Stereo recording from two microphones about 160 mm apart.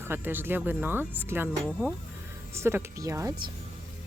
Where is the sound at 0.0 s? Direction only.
15° right (ahead or behind).